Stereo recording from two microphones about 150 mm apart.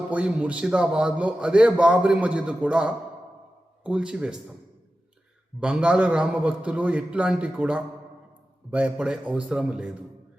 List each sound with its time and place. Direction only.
0.1 s a man's voice: 10° right (ahead or behind)
5.5 s a man's voice: 5° right (ahead or behind)